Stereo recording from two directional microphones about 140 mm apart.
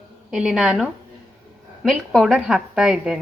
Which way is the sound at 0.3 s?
5° right (ahead or behind).